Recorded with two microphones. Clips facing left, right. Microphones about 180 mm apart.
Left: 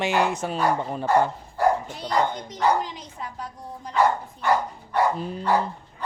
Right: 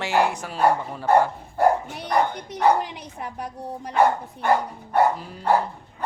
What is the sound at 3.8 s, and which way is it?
Dog, 60° right (ahead or behind).